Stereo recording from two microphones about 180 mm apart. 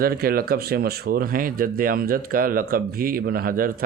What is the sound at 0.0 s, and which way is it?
Speech, 55° right (ahead or behind).